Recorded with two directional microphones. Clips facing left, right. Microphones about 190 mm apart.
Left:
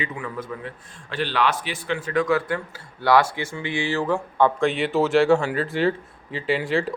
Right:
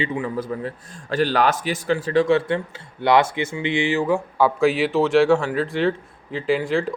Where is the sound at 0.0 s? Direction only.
30° right (ahead or behind).